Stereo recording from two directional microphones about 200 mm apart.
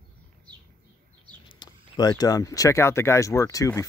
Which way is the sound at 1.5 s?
20° left (ahead or behind).